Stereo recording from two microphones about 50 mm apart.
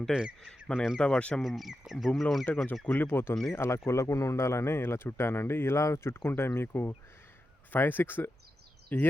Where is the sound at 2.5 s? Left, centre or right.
Left.